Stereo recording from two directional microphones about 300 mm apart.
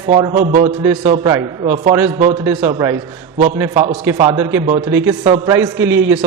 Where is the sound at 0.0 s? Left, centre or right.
Centre.